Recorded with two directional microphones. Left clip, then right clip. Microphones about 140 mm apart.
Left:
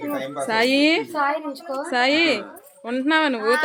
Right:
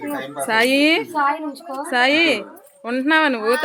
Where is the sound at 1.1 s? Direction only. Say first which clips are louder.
Right 3 dB; 60° left (ahead or behind).